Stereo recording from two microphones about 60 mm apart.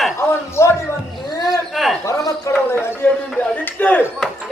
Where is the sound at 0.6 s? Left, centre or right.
Left.